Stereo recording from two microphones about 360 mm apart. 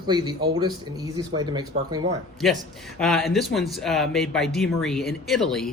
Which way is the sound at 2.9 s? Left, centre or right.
Centre.